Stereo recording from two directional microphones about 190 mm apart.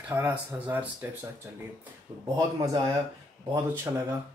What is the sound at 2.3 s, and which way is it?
Speech, 20° right (ahead or behind).